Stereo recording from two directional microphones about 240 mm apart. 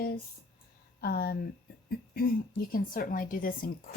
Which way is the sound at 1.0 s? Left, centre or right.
Left.